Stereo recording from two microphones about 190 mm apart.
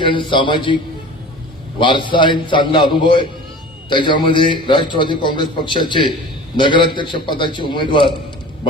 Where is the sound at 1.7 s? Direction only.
25° left (ahead or behind).